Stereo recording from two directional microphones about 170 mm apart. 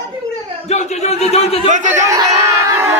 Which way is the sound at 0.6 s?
40° left (ahead or behind).